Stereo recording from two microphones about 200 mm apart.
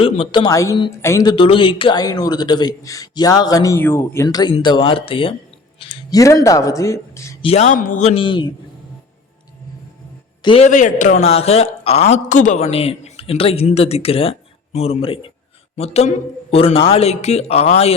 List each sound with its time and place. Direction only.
0.0 s speech: 25° left (ahead or behind)
1.4 s speech: 25° left (ahead or behind)
7.4 s a man's voice: 35° left (ahead or behind)
10.4 s a man's voice: 30° left (ahead or behind)